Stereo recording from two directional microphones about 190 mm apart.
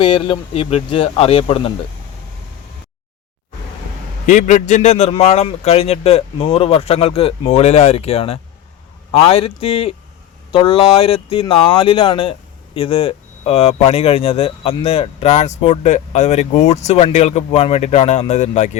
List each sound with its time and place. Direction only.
0.0 s speech: 30° left (ahead or behind)
4.3 s speech: 40° left (ahead or behind)